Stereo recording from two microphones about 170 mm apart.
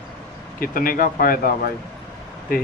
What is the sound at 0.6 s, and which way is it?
Speech, 55° left (ahead or behind).